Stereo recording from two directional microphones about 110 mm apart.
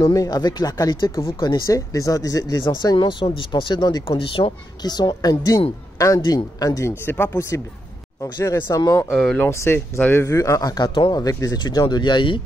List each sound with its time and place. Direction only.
0.0 s speech: 35° left (ahead or behind)
2.6 s speech: 45° left (ahead or behind)
4.2 s speech: 55° left (ahead or behind)
4.8 s speech: 40° left (ahead or behind)
9.1 s speech: 5° left (ahead or behind)
9.4 s speech: 25° left (ahead or behind)
10.2 s speech: 30° left (ahead or behind); by 12.4 s 45° left (ahead or behind)